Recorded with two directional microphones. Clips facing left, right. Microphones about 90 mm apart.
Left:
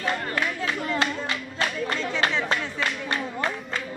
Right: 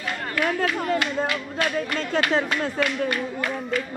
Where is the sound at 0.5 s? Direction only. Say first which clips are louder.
Right 5 dB; 55° right (ahead or behind).